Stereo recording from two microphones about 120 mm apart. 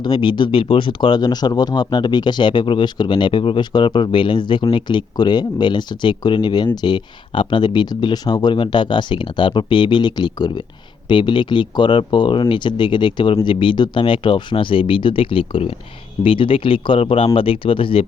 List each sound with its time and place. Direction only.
0.0 s speech: 40° left (ahead or behind)